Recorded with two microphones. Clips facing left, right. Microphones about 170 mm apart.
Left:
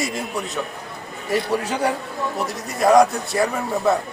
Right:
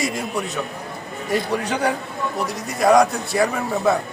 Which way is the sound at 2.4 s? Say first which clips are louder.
Even; centre (ahead or behind).